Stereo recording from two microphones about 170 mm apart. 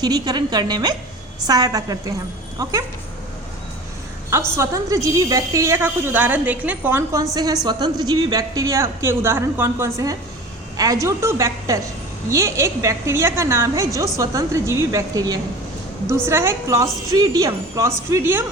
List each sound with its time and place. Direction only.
0.0 s a woman's voice: 25° right (ahead or behind)
4.5 s a woman's voice: 15° right (ahead or behind)